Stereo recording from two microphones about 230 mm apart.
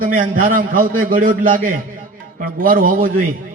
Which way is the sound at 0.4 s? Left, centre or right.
Right.